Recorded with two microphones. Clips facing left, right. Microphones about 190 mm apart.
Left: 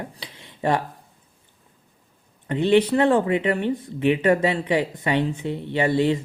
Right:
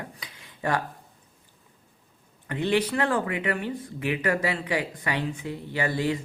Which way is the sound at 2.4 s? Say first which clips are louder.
Left 7 dB; 25° left (ahead or behind).